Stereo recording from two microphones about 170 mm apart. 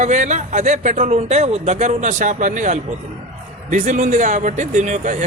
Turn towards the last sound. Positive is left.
turn(degrees=-45)  # may be behind; listen again after turning